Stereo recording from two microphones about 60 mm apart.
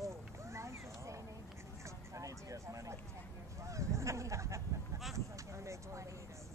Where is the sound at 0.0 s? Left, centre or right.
Right.